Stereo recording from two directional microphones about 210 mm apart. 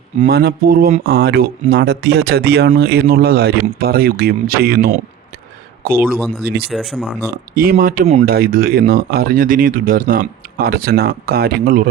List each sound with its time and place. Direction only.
0.3 s speech: 45° right (ahead or behind)
1.0 s speech: 50° right (ahead or behind)
6.1 s speech: 5° left (ahead or behind)
6.4 s speech: 50° right (ahead or behind)
6.7 s speech: centre (ahead or behind)
7.3 s speech: 45° right (ahead or behind)